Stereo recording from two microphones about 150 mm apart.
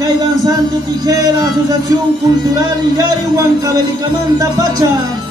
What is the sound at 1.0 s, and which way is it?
Music, 25° right (ahead or behind).